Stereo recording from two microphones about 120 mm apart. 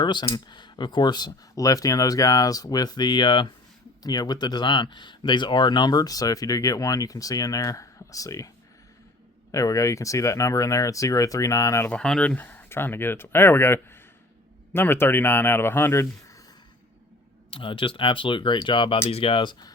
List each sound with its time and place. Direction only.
0.0 s speech: 40° left (ahead or behind)
9.5 s speech: 25° left (ahead or behind)
11.9 s speech: 5° left (ahead or behind); by 16.4 s 20° left (ahead or behind)
17.5 s speech: 45° left (ahead or behind)
19.0 s speech: 50° left (ahead or behind)